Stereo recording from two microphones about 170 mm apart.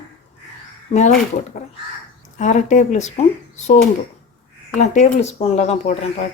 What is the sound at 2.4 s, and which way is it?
Speech, 45° left (ahead or behind).